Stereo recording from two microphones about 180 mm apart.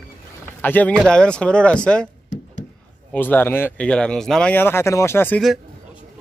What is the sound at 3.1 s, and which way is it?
Speech, 10° left (ahead or behind).